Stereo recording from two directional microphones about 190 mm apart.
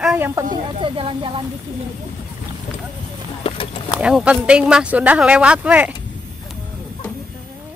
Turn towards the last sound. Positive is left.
turn(degrees=-10)  # may be behind; listen again after turning